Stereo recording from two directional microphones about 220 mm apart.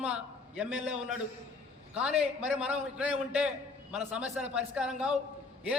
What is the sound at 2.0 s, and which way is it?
A man's voice, 5° right (ahead or behind).